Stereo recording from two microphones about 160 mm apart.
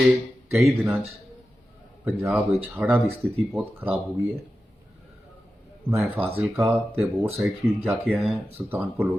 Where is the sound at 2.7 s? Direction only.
10° right (ahead or behind).